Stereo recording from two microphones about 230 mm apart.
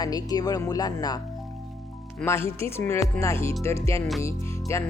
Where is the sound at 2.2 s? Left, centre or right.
Centre.